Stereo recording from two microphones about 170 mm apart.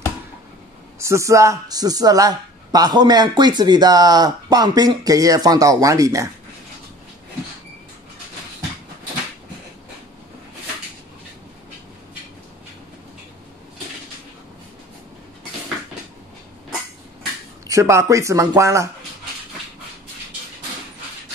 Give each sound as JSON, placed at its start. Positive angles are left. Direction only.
{"t": 0.9, "sound": "speech", "side_deg": -15}
{"t": 17.6, "sound": "speech", "side_deg": -20}